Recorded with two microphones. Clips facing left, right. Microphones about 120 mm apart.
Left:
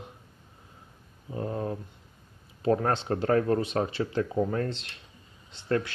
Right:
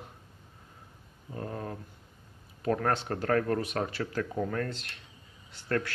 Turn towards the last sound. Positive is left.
turn(degrees=20)  # may be behind; listen again after turning